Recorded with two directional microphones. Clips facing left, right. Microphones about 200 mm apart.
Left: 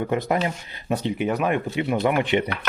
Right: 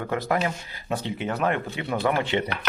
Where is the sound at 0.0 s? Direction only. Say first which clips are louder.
Left 2 dB; 20° left (ahead or behind).